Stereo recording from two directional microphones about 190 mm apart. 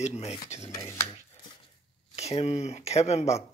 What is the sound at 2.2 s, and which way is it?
Speech, 35° left (ahead or behind).